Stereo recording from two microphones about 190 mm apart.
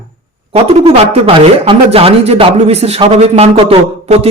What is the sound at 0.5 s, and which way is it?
Speech, 30° right (ahead or behind).